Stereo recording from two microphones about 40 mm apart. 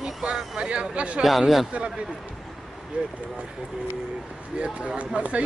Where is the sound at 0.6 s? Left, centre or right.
Right.